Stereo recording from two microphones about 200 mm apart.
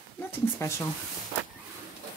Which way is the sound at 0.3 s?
15° left (ahead or behind).